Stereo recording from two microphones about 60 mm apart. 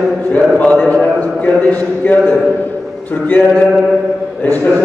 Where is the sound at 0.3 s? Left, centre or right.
Left.